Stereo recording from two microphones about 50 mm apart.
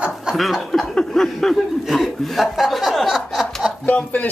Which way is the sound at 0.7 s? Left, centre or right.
Centre.